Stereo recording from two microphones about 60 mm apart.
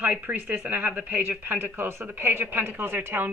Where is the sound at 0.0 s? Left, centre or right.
Right.